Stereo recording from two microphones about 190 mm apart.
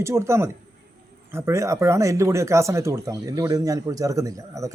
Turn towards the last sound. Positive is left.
turn(degrees=-15)  # may be behind; listen again after turning